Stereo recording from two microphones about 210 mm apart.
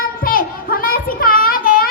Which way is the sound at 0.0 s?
45° left (ahead or behind).